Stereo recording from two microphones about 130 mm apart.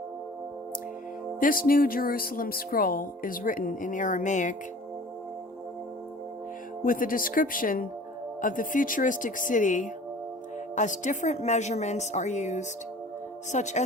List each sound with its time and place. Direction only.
1.4 s speech: 90° left; by 4.5 s 75° left (ahead or behind)
6.8 s a woman's voice: 90° left; by 13.8 s 65° left (ahead or behind)